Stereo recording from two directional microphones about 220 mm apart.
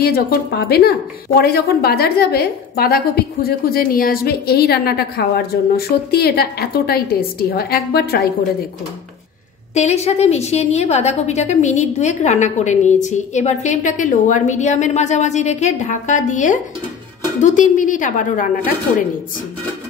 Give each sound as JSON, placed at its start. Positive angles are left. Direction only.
{"t": 0.0, "sound": "a woman's voice", "side_deg": 45}
{"t": 9.8, "sound": "a woman's voice", "side_deg": 30}